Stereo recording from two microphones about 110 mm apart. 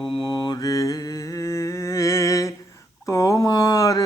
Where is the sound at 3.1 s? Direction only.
30° left (ahead or behind).